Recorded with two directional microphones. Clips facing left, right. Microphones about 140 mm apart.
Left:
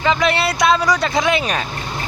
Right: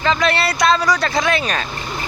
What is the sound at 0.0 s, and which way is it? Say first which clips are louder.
Speech: left 1 dB; 10° left (ahead or behind).